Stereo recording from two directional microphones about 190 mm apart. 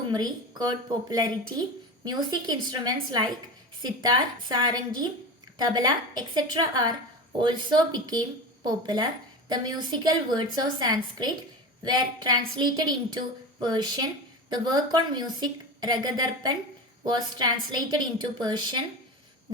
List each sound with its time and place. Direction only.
0.1 s a woman's voice: 20° right (ahead or behind)